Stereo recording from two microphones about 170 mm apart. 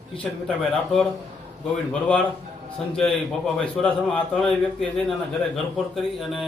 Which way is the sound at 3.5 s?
5° left (ahead or behind).